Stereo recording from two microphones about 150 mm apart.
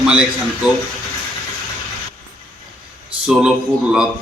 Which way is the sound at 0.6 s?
5° right (ahead or behind).